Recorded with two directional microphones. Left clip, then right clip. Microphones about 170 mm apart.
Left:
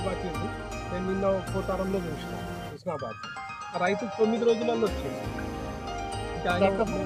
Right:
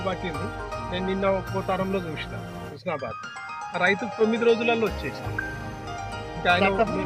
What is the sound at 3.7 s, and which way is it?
Speech, 15° left (ahead or behind).